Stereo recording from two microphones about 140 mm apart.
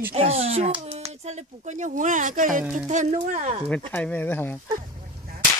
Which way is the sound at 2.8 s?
55° right (ahead or behind).